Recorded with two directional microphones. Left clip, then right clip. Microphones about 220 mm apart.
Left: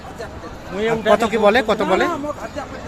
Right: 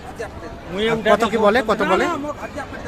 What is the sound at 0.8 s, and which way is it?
Speech, 35° right (ahead or behind).